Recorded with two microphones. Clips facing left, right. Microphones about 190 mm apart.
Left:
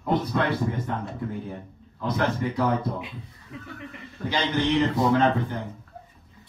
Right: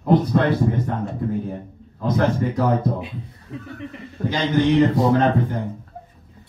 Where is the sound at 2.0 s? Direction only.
40° right (ahead or behind).